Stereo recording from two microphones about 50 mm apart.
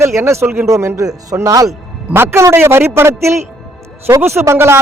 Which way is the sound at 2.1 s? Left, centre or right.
Right.